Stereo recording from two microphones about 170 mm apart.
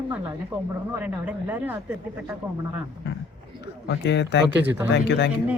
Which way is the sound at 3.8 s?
90° left.